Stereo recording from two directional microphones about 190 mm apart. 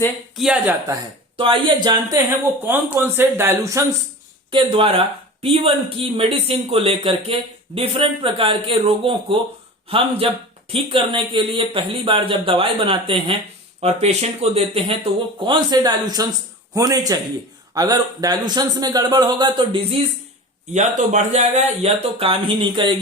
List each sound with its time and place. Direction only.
0.3 s speech: 5° right (ahead or behind)
1.4 s speech: 25° right (ahead or behind)
4.5 s speech: 30° right (ahead or behind)
10.7 s speech: 30° right (ahead or behind)
15.4 s speech: 20° right (ahead or behind)
20.7 s speech: 40° right (ahead or behind)